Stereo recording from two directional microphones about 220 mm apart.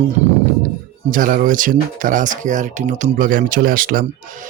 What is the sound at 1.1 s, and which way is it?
Speech, 40° right (ahead or behind).